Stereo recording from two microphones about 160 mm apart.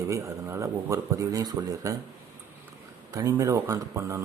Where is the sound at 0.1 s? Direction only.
20° right (ahead or behind).